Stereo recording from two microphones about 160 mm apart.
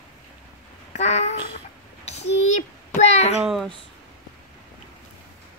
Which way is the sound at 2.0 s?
45° left (ahead or behind).